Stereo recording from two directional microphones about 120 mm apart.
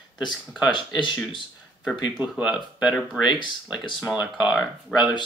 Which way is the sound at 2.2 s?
10° right (ahead or behind).